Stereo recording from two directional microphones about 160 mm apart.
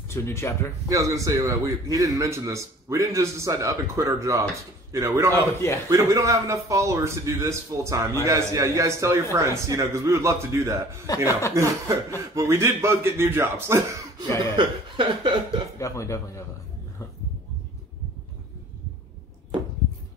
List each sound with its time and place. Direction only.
0.1 s speech: 15° left (ahead or behind)
0.8 s a man's voice: 20° right (ahead or behind)
5.3 s speech: 15° left (ahead or behind)
5.9 s a man's voice: 20° right (ahead or behind)
14.4 s a man's voice: 30° right (ahead or behind)
15.8 s a man's voice: 20° left (ahead or behind)